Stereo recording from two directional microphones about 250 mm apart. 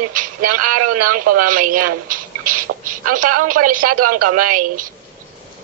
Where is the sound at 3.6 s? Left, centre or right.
Right.